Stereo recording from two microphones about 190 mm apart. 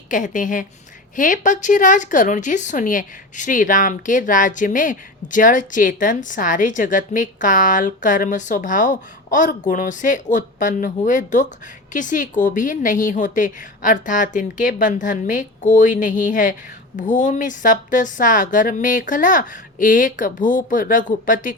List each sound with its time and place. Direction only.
0.1 s a woman's voice: 45° left (ahead or behind)